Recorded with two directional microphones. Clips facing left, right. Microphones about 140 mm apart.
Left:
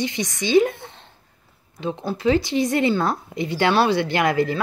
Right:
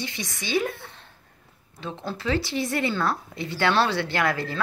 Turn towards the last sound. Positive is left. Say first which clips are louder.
# left 6 dB
turn(degrees=15)  # may be behind; listen again after turning